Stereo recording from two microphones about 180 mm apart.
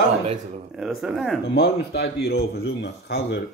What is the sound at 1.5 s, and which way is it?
Speech, 65° left (ahead or behind).